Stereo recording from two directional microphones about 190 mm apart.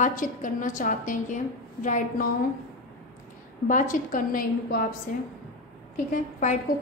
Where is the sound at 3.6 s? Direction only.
45° left (ahead or behind).